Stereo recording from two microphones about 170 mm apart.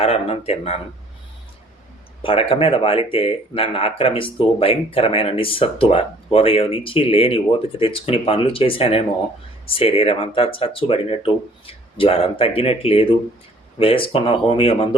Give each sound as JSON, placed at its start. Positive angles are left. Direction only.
{"t": 0.0, "sound": "speech", "side_deg": 35}
{"t": 2.2, "sound": "speech", "side_deg": 35}